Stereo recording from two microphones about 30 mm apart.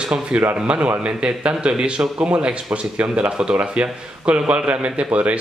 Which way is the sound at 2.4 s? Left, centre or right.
Right.